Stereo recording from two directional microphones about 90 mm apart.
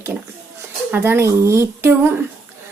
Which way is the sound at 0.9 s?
25° right (ahead or behind).